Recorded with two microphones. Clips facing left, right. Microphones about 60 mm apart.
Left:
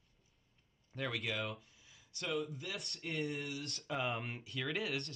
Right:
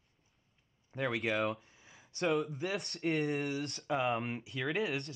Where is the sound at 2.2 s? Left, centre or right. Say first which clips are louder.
Right 7 dB; right.